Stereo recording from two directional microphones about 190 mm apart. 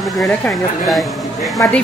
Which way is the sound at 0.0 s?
Centre (ahead or behind).